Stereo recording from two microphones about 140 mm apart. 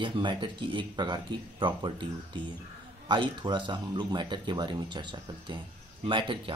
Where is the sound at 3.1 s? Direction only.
35° right (ahead or behind).